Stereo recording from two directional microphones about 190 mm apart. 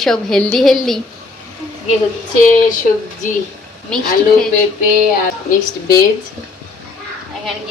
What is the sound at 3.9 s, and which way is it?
Speech, 5° left (ahead or behind).